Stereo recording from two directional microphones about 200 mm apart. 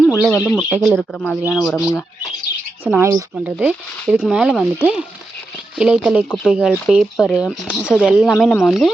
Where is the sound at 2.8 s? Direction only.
10° right (ahead or behind).